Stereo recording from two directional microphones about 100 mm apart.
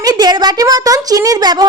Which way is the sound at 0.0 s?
40° right (ahead or behind).